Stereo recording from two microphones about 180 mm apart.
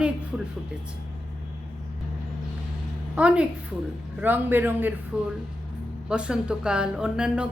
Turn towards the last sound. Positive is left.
turn(degrees=-5)  # may be behind; listen again after turning